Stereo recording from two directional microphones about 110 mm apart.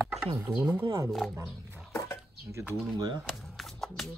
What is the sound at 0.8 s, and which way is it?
Speech, 35° right (ahead or behind).